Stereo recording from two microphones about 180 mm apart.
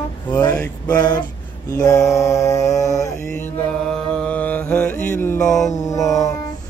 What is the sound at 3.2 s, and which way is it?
Mantra, 5° left (ahead or behind).